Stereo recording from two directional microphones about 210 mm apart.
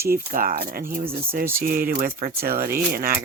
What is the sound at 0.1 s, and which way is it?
Speech, 45° right (ahead or behind).